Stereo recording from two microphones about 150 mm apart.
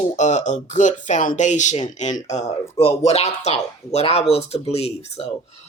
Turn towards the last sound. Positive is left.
turn(degrees=45)  # may be behind; listen again after turning